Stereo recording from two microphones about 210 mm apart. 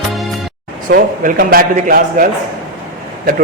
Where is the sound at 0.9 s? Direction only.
45° right (ahead or behind).